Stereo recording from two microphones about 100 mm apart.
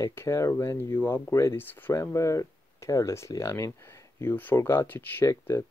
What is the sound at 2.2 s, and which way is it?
Speech, 30° left (ahead or behind).